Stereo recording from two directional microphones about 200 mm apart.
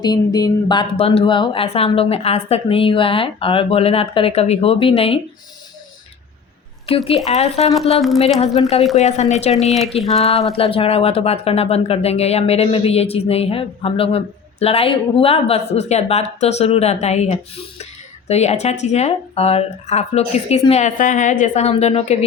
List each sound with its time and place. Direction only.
0.0 s speech: 20° left (ahead or behind)
6.8 s speech: 30° left (ahead or behind)
9.0 s speech: 35° left (ahead or behind)
9.6 s a sound: centre (ahead or behind)
10.2 s speech: 30° left (ahead or behind)